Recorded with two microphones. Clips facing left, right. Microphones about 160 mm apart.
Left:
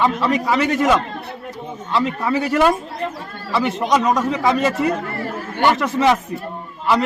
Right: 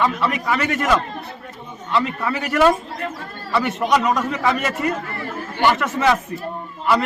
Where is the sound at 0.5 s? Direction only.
20° left (ahead or behind).